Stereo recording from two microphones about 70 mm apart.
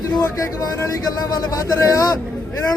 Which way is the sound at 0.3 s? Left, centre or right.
Left.